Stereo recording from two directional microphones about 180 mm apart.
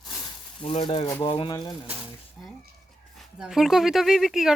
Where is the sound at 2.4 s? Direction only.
Centre (ahead or behind).